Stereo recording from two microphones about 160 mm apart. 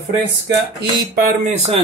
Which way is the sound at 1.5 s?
45° right (ahead or behind).